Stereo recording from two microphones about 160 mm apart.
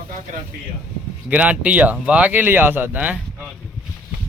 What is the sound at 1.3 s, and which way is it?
Speech, 10° right (ahead or behind).